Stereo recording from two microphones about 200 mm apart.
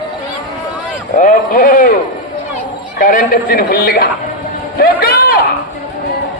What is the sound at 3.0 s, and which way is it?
A man's voice, 45° left (ahead or behind).